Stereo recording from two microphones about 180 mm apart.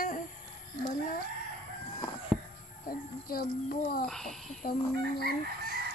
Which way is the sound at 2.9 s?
55° left (ahead or behind).